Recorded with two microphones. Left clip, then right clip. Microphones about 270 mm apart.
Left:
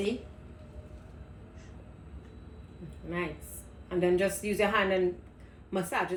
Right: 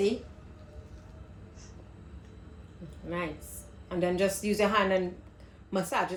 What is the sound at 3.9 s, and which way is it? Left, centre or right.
A woman's voice, right.